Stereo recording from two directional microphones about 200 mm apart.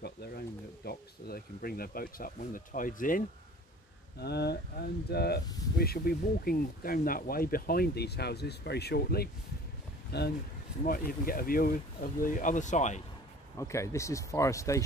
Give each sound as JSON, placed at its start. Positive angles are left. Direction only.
{"t": 0.8, "sound": "speech", "side_deg": 50}
{"t": 4.2, "sound": "speech", "side_deg": 55}
{"t": 10.8, "sound": "speech", "side_deg": 45}
{"t": 13.6, "sound": "speech", "side_deg": 15}